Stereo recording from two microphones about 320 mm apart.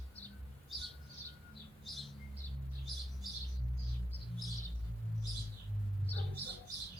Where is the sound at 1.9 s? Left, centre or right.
Centre.